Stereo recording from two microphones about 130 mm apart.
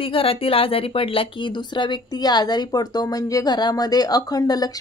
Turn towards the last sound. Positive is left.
turn(degrees=30)  # may be behind; listen again after turning